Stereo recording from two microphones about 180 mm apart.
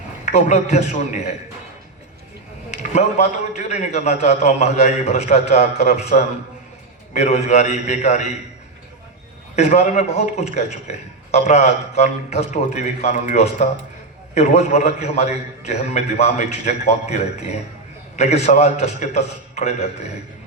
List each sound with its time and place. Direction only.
0.3 s a man's voice: 40° left (ahead or behind)
2.6 s a man's voice: 35° left (ahead or behind)
9.6 s a man's voice: 35° left (ahead or behind)